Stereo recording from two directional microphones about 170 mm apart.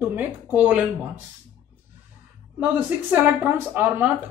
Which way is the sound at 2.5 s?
10° right (ahead or behind).